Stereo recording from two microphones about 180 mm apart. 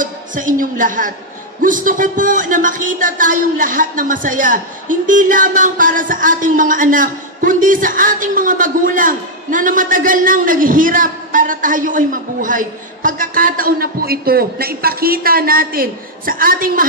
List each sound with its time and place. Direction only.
0.0 s speech: 45° right (ahead or behind)